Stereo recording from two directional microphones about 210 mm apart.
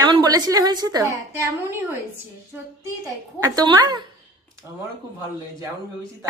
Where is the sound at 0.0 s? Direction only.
20° right (ahead or behind).